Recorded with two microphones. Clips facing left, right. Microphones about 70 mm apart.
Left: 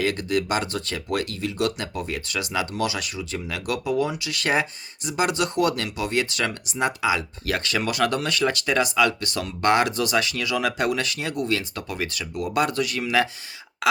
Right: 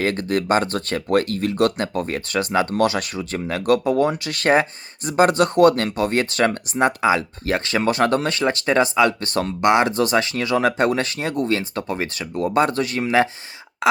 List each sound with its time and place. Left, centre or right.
0.0 s speech: right
9.6 s speech: right